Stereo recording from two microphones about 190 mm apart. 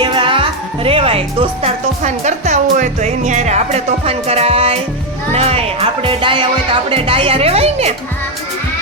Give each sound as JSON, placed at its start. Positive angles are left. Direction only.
{"t": 0.0, "sound": "music", "side_deg": -25}
{"t": 0.9, "sound": "speech", "side_deg": -30}
{"t": 5.3, "sound": "music", "side_deg": -30}